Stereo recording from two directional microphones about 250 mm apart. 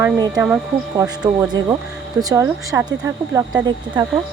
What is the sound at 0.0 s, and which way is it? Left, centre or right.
Speech, centre.